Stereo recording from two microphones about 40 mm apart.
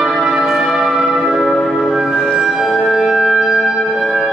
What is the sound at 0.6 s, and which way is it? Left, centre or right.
Church bell, centre.